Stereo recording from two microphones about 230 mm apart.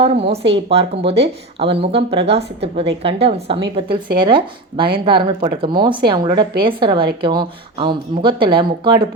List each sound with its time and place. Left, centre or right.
0.0 s a woman's voice: right